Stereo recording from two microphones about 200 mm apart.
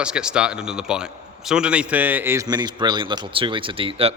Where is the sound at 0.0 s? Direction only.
5° right (ahead or behind).